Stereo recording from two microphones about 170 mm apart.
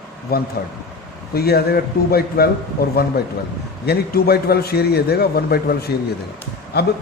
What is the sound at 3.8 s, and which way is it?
A man's voice, 65° left (ahead or behind).